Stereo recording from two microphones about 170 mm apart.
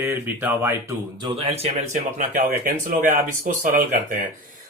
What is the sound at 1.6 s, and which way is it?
Speech, 40° right (ahead or behind).